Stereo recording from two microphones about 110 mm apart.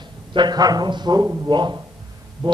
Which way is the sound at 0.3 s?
40° right (ahead or behind).